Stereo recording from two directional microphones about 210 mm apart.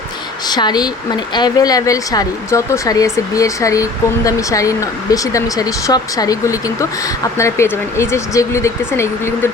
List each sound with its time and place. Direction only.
0.4 s speech: 20° left (ahead or behind)